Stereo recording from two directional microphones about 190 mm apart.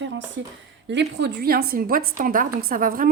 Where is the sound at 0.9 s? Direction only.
65° right (ahead or behind).